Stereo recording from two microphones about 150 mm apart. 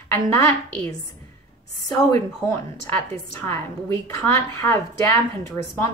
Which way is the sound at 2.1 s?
15° left (ahead or behind).